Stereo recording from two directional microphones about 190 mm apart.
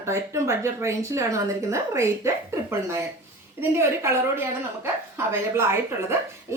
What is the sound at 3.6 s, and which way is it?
Speech, 15° right (ahead or behind).